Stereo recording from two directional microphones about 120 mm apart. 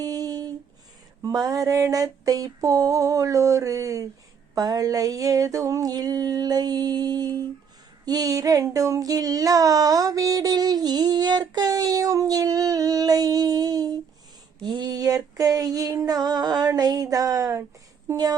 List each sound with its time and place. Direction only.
0.0 s humming: 30° right (ahead or behind)
1.2 s a sound: 30° right (ahead or behind)
18.1 s speech: 30° right (ahead or behind)